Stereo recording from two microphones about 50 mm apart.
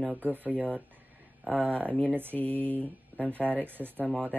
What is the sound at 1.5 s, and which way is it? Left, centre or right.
Speech, left.